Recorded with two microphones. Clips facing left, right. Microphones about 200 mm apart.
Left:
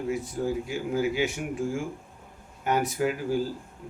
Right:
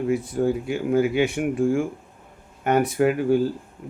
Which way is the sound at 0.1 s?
60° right (ahead or behind).